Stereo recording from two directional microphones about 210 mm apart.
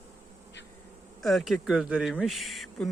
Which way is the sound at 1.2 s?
Centre (ahead or behind).